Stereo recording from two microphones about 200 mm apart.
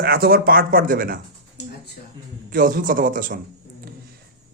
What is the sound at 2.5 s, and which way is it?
Speech, 45° right (ahead or behind).